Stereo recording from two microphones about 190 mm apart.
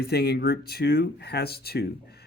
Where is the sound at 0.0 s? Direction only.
55° left (ahead or behind).